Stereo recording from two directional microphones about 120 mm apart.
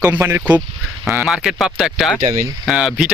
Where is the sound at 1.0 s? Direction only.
5° right (ahead or behind).